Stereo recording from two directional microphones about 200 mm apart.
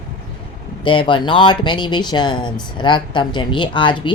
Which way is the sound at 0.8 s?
25° left (ahead or behind).